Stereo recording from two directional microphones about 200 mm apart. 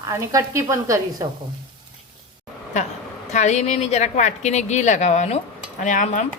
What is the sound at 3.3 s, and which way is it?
A woman's voice, 35° left (ahead or behind).